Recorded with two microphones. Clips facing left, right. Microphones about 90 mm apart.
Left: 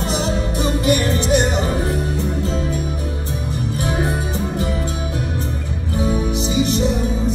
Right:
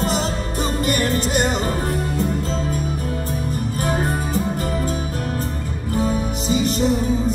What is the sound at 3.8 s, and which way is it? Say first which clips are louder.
Music: even; 40° right (ahead or behind).